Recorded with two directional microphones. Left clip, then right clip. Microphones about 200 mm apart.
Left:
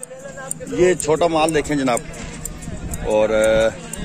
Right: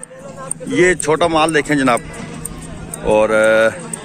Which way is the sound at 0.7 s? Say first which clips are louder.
Right 3 dB; 5° right (ahead or behind).